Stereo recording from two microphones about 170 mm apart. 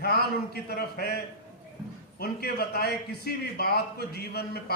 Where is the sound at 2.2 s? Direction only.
65° left (ahead or behind).